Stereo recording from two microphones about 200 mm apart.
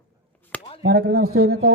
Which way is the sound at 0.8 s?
55° right (ahead or behind).